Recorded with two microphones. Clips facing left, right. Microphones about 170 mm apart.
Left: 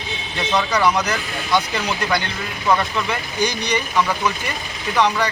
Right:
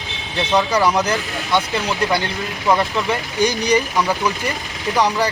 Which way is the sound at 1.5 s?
Centre (ahead or behind).